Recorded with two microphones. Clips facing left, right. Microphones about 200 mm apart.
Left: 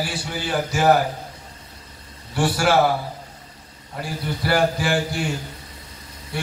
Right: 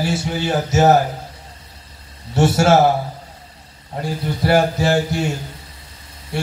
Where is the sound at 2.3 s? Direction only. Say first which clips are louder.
Right 5 dB; 25° right (ahead or behind).